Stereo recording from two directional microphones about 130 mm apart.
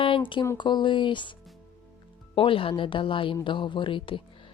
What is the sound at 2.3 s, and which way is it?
Speech, 45° left (ahead or behind).